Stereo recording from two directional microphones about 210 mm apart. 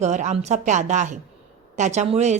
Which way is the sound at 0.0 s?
35° right (ahead or behind).